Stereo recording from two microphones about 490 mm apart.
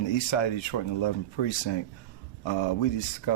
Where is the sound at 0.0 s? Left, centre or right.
Left.